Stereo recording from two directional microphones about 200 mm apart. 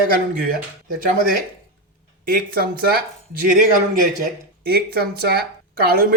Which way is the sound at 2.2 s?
45° right (ahead or behind).